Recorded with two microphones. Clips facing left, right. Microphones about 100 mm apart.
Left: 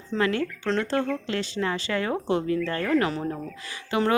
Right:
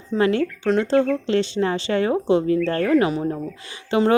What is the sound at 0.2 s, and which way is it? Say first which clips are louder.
Speech: right 6 dB; 25° right (ahead or behind).